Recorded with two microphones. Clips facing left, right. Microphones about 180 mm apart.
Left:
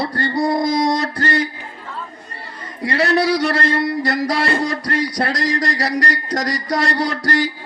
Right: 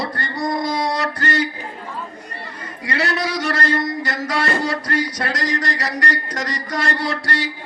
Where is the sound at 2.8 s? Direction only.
35° left (ahead or behind).